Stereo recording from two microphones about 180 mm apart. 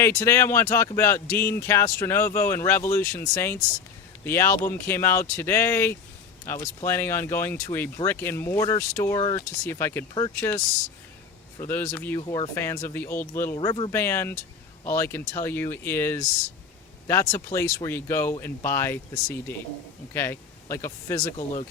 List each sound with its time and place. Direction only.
0.0 s speech: 15° left (ahead or behind)
11.6 s speech: 10° left (ahead or behind)
12.2 s speech: 25° left (ahead or behind)
12.5 s speech: 15° left (ahead or behind)
13.6 s speech: 25° left (ahead or behind)
13.9 s speech: 15° left (ahead or behind)
21.3 s speech: 30° left (ahead or behind)